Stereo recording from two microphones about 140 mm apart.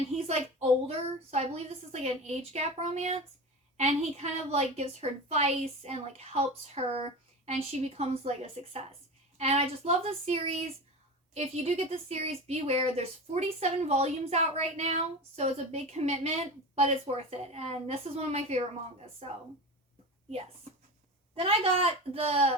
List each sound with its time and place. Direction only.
0.9 s speech: 50° right (ahead or behind)
21.3 s speech: 40° right (ahead or behind)